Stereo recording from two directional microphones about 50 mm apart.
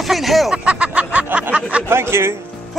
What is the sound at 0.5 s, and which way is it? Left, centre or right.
Speech, right.